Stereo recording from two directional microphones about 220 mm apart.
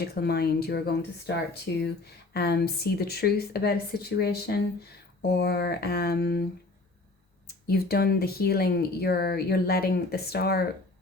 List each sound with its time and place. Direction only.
0.1 s speech: 45° left (ahead or behind)
7.4 s speech: 45° left (ahead or behind)